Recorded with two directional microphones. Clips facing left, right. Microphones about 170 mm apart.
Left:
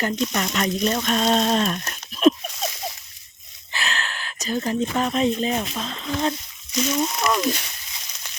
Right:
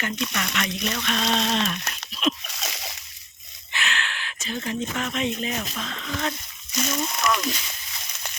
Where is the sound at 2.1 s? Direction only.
45° left (ahead or behind).